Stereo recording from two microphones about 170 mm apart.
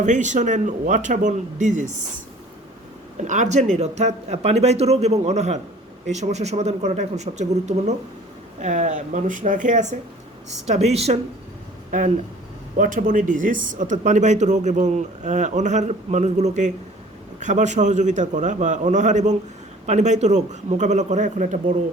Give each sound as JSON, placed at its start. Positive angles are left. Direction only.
{"t": 0.0, "sound": "speech", "side_deg": -45}
{"t": 3.2, "sound": "speech", "side_deg": -45}
{"t": 11.9, "sound": "speech", "side_deg": -50}